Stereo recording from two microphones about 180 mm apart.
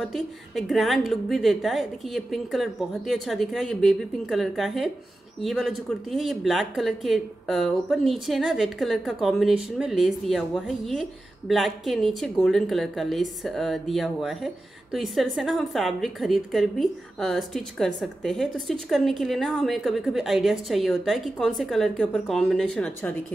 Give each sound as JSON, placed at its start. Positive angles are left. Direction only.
{"t": 0.0, "sound": "speech", "side_deg": 0}